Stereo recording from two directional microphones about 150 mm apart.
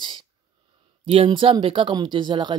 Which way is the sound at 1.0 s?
35° right (ahead or behind).